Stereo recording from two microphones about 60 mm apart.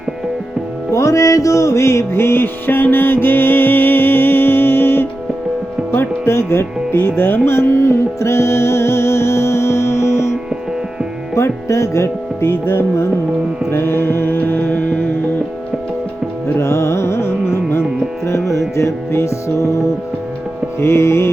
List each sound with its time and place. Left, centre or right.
0.9 s music: left
11.4 s music: left
13.7 s mantra: left
16.6 s carnatic music: left
18.8 s music: left